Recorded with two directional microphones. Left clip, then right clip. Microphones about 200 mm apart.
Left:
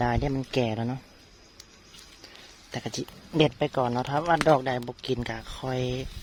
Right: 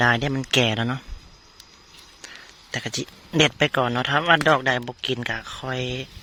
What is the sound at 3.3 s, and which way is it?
Speech, 10° right (ahead or behind).